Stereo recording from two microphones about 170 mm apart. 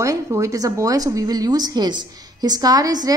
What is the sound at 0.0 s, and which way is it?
A woman's voice, 20° right (ahead or behind).